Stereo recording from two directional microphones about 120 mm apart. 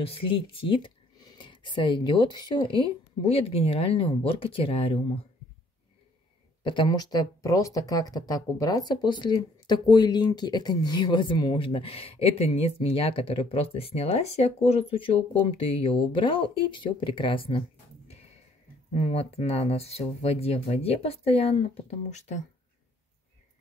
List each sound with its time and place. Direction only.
0.1 s speech: 50° left (ahead or behind)
6.6 s speech: 40° left (ahead or behind)
11.5 s speech: 50° left (ahead or behind)
22.1 s speech: 75° left (ahead or behind)